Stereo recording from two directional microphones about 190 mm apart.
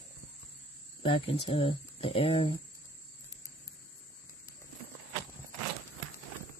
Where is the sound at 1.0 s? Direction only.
30° left (ahead or behind).